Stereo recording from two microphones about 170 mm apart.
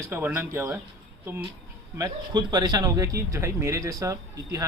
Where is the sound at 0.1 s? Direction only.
10° right (ahead or behind).